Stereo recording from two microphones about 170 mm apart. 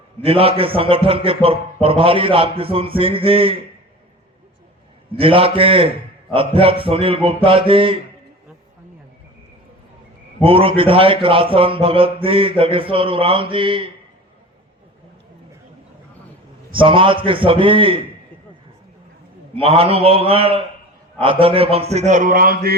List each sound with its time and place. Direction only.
0.2 s a man's voice: 35° right (ahead or behind)
5.1 s a man's voice: 35° right (ahead or behind)
10.4 s a man's voice: 30° right (ahead or behind)
16.7 s a man's voice: 30° right (ahead or behind)
19.5 s a man's voice: 35° right (ahead or behind); by 22.8 s 65° right (ahead or behind)